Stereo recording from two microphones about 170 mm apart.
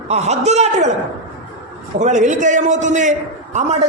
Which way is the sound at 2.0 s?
45° right (ahead or behind).